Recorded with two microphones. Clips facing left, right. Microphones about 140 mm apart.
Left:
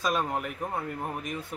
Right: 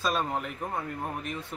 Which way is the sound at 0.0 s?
10° left (ahead or behind).